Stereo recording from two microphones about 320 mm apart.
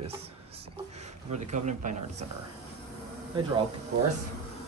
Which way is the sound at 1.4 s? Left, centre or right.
Right.